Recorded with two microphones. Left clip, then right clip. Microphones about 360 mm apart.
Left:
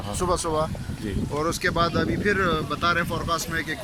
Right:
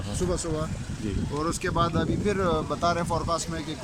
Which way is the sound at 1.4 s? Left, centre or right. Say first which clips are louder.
Left 3 dB; centre.